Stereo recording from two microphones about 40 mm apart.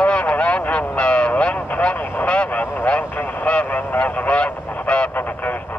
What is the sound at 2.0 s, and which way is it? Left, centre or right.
Vehicle, left.